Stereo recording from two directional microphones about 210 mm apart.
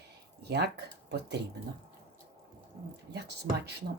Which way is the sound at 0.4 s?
50° right (ahead or behind).